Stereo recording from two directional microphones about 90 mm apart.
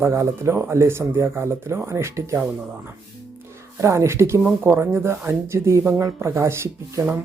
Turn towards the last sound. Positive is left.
turn(degrees=-30)  # may be behind; listen again after turning